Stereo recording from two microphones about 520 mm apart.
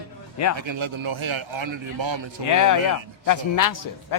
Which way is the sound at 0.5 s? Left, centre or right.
Right.